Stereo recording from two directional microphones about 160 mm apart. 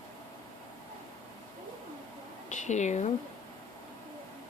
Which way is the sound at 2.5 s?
45° left (ahead or behind).